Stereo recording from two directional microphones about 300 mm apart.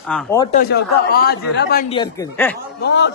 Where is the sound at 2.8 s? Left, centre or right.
Left.